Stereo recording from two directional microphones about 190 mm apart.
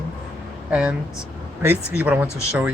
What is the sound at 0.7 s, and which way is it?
Speech, 5° right (ahead or behind).